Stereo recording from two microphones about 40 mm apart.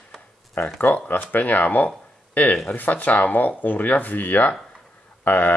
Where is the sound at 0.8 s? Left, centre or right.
Left.